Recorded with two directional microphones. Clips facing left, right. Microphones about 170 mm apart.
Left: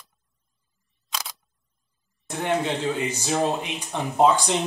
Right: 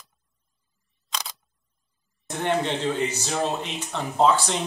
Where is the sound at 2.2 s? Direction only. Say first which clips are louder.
Even; 10° left (ahead or behind).